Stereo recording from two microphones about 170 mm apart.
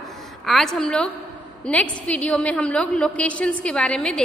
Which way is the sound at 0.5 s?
Centre (ahead or behind).